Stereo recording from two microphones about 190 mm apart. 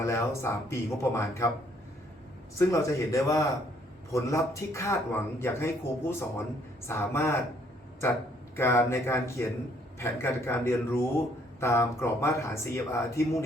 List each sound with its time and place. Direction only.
0.0 s speech: 15° left (ahead or behind)
2.6 s speech: 15° left (ahead or behind)
8.5 s speech: 15° left (ahead or behind)